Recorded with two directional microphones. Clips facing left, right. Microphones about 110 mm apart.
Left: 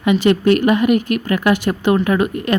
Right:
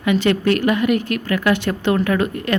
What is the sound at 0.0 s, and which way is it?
A woman's voice, 20° left (ahead or behind).